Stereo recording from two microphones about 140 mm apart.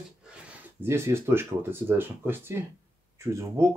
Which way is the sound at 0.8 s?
20° right (ahead or behind).